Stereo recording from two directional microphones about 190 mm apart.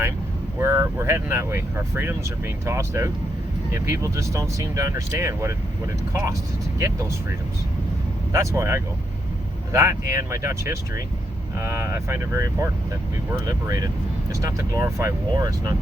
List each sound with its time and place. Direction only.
0.6 s speech: 15° right (ahead or behind)
6.7 s speech: 15° right (ahead or behind)